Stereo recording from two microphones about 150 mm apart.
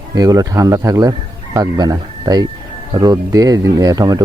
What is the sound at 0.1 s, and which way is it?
Speech, 25° right (ahead or behind).